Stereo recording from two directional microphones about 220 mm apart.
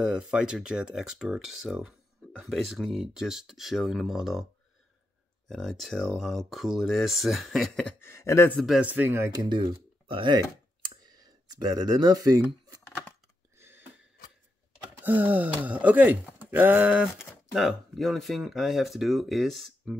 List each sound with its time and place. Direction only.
0.0 s speech: 5° right (ahead or behind)
5.5 s speech: centre (ahead or behind); by 12.8 s 15° right (ahead or behind)
13.6 s a sound: 10° right (ahead or behind)
15.0 s speech: 10° right (ahead or behind)